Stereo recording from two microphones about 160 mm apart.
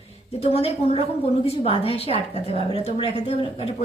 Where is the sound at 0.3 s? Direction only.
40° left (ahead or behind).